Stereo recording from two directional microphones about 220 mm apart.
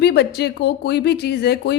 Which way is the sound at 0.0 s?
50° left (ahead or behind).